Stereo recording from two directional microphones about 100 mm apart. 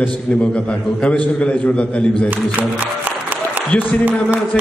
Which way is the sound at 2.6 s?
15° right (ahead or behind).